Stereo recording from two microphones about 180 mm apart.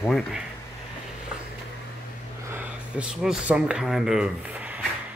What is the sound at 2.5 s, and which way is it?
Speech, 10° right (ahead or behind).